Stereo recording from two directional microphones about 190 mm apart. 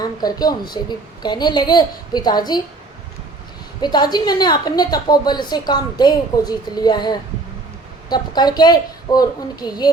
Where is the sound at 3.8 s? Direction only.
20° left (ahead or behind).